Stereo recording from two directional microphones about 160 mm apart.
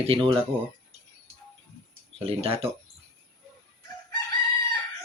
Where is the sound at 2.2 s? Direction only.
40° right (ahead or behind).